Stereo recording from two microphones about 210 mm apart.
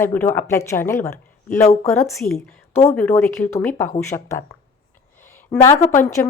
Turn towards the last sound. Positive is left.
turn(degrees=10)  # may be behind; listen again after turning